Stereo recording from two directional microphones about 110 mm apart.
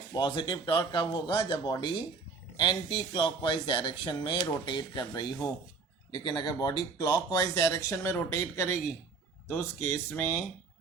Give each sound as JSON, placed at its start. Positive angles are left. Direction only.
{"t": 0.1, "sound": "speech", "side_deg": 45}